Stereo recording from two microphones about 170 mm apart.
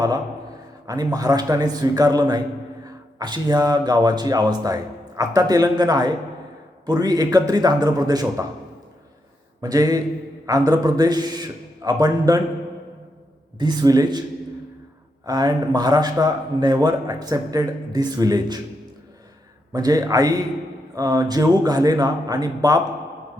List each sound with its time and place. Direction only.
0.9 s a man's voice: 20° right (ahead or behind)
9.6 s a man's voice: 20° right (ahead or behind)
13.6 s a man's voice: 25° right (ahead or behind)
15.3 s a man's voice: 25° right (ahead or behind)
19.7 s a man's voice: 20° right (ahead or behind)